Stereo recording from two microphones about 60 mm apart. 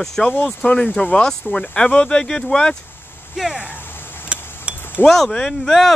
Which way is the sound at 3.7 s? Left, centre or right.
Left.